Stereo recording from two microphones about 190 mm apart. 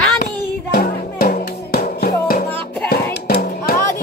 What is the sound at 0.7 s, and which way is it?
Music, 50° left (ahead or behind).